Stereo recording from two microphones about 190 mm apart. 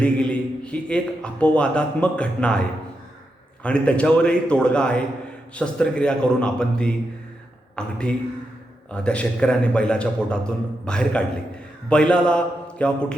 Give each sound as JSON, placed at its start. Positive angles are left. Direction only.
{"t": 0.0, "sound": "a man's voice", "side_deg": 5}